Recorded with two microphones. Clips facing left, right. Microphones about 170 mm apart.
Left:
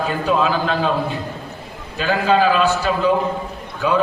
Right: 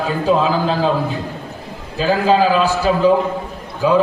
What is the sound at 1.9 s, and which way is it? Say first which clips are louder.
Speech: right 2 dB; 35° right (ahead or behind).